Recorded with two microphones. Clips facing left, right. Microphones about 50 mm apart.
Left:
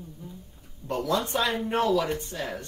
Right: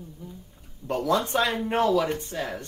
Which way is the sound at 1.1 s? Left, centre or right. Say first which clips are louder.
Right 2 dB; right.